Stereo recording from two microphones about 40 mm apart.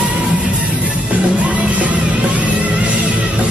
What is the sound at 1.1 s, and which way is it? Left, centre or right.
Music, right.